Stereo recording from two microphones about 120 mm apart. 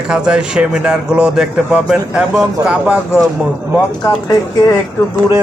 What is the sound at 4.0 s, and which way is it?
Speech, 30° left (ahead or behind).